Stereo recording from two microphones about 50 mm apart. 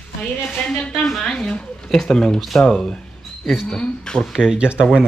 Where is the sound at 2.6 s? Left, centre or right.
Centre.